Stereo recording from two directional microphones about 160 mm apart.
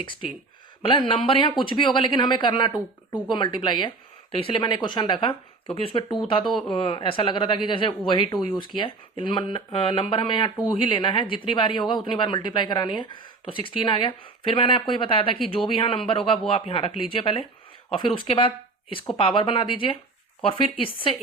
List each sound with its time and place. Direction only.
0.8 s a woman's voice: 30° left (ahead or behind)
6.4 s speech: centre (ahead or behind)
6.7 s a woman's voice: 35° left (ahead or behind)